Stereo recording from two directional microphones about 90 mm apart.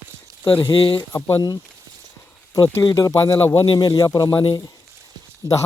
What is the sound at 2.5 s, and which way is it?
Speech, 40° left (ahead or behind).